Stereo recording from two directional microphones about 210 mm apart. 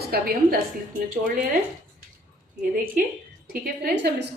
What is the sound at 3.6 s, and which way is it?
Speech, 50° right (ahead or behind).